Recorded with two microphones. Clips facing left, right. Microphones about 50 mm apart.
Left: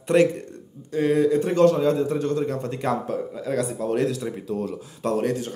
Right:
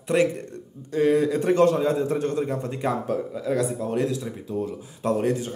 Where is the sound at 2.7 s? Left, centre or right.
Centre.